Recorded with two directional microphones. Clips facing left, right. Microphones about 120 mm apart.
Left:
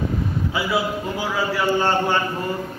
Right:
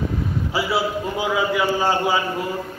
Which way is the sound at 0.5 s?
30° right (ahead or behind).